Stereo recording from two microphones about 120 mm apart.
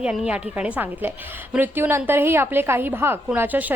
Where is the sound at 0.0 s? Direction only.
5° right (ahead or behind).